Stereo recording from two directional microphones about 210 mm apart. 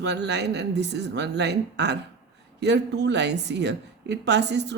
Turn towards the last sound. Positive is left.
turn(degrees=-55)  # may be behind; listen again after turning